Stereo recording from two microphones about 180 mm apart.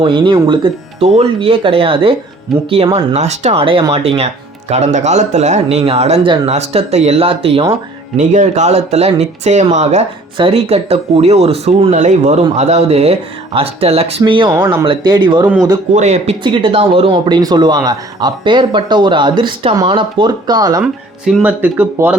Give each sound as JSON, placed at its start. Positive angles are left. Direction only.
{"t": 0.0, "sound": "speech", "side_deg": -25}
{"t": 8.1, "sound": "speech", "side_deg": -45}
{"t": 16.0, "sound": "speech", "side_deg": -35}
{"t": 20.8, "sound": "speech", "side_deg": -5}